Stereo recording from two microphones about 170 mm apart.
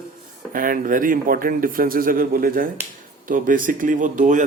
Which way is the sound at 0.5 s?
55° right (ahead or behind).